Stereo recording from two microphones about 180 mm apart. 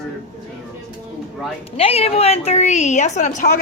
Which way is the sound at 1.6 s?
35° left (ahead or behind).